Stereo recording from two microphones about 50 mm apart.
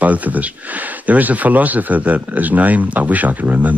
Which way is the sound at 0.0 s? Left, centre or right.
Right.